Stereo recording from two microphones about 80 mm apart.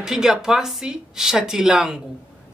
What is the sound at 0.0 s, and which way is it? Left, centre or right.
A woman's voice, centre.